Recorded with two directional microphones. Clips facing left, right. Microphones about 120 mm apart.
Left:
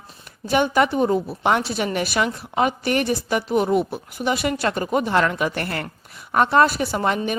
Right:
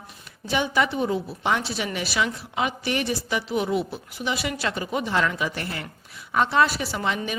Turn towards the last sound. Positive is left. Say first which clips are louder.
# left 5 dB
turn(degrees=45)  # may be behind; listen again after turning